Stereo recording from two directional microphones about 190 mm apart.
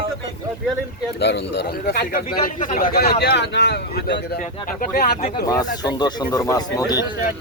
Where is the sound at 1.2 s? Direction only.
65° left (ahead or behind).